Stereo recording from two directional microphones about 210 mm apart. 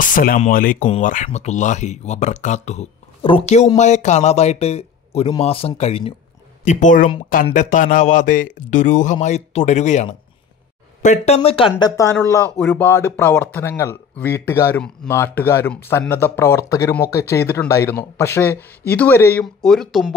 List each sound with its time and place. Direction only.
0.0 s a man's voice: 40° left (ahead or behind)
11.8 s speech: 15° left (ahead or behind)